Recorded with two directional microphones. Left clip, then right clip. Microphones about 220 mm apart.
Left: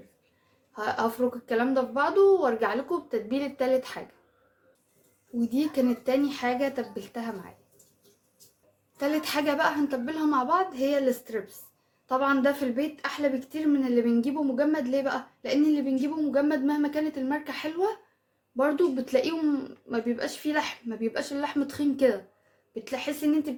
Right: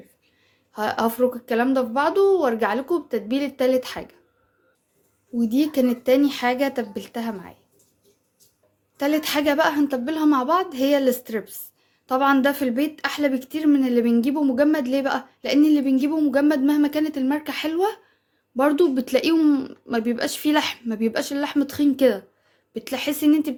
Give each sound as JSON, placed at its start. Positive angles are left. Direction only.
{"t": 0.7, "sound": "speech", "side_deg": -45}
{"t": 5.4, "sound": "speech", "side_deg": -40}
{"t": 9.0, "sound": "speech", "side_deg": -35}